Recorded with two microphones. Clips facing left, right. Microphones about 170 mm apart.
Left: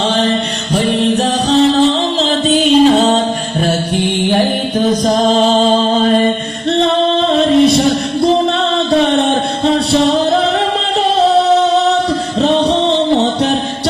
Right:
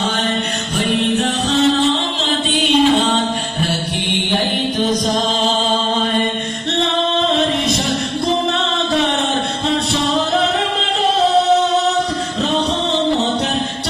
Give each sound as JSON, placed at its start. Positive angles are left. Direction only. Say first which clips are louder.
{"t": 0.8, "sound": "music", "louder": "left 4 dB", "side_deg": 30}
{"t": 6.7, "sound": "music", "louder": "left 7 dB", "side_deg": 30}
{"t": 8.9, "sound": "a sound", "louder": "left 7 dB", "side_deg": 30}
{"t": 9.6, "sound": "music", "louder": "left 8 dB", "side_deg": 35}